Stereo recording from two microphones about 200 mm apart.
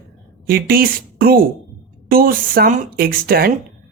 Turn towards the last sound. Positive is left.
turn(degrees=-45)  # may be behind; listen again after turning